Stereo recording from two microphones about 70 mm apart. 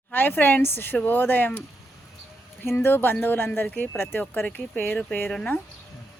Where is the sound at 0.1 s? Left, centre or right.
Left.